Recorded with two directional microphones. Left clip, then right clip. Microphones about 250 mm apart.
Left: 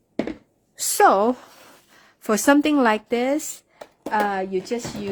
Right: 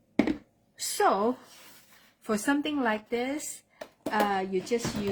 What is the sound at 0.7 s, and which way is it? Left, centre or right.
A woman's voice, left.